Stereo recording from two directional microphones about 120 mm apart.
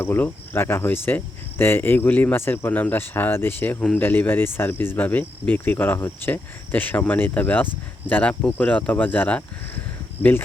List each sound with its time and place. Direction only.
0.0 s cricket: 20° left (ahead or behind)